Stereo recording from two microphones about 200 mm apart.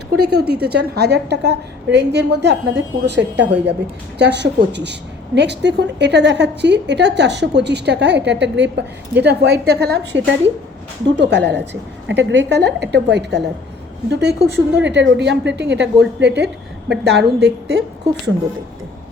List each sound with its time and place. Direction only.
0.2 s a woman's voice: 55° right (ahead or behind)